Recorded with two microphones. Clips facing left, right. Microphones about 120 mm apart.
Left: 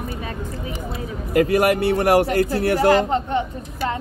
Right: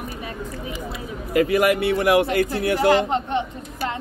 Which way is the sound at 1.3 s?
40° left (ahead or behind).